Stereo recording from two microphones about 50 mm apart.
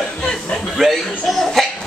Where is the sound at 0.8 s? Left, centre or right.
Centre.